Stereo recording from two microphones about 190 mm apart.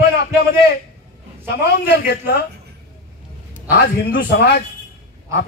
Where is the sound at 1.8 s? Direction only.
60° left (ahead or behind).